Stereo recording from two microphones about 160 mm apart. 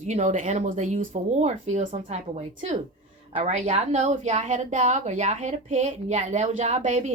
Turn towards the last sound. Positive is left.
turn(degrees=-50)  # may be behind; listen again after turning